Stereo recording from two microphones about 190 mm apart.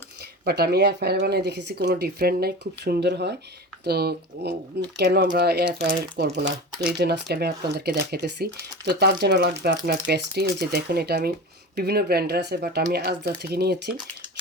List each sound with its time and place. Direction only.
0.4 s speech: 60° right (ahead or behind)